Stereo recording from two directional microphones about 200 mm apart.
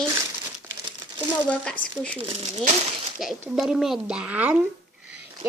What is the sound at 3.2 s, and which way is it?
Speech, centre (ahead or behind).